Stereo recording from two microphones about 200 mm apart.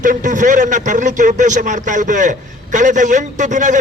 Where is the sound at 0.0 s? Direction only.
40° right (ahead or behind).